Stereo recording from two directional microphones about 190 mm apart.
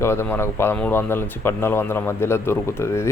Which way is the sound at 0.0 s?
10° left (ahead or behind).